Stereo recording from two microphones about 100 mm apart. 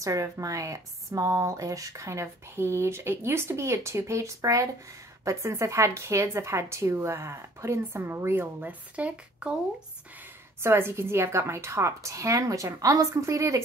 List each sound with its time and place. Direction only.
0.0 s a woman's voice: 30° right (ahead or behind); by 9.6 s 10° right (ahead or behind)
10.6 s a woman's voice: 25° right (ahead or behind)